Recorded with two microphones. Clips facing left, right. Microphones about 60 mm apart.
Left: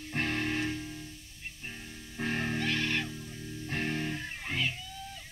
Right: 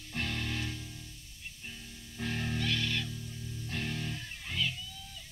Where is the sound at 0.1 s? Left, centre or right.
Left.